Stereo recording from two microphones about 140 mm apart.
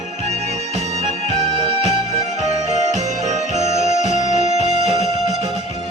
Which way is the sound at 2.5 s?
55° right (ahead or behind).